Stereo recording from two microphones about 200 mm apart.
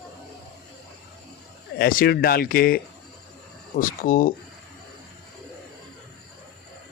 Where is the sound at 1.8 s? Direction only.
50° left (ahead or behind).